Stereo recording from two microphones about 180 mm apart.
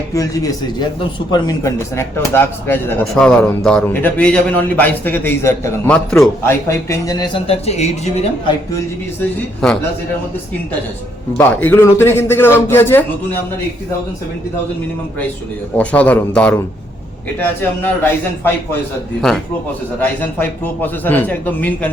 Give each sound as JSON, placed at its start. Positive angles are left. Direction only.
{"t": 0.1, "sound": "speech", "side_deg": 20}
{"t": 6.5, "sound": "speech", "side_deg": 15}
{"t": 7.4, "sound": "speech", "side_deg": 35}
{"t": 11.3, "sound": "speech", "side_deg": 10}
{"t": 15.8, "sound": "speech", "side_deg": 10}
{"t": 17.6, "sound": "speech", "side_deg": 10}
{"t": 20.0, "sound": "speech", "side_deg": 10}